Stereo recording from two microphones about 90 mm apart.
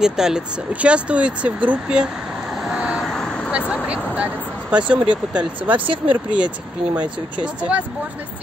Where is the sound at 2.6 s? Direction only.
10° right (ahead or behind).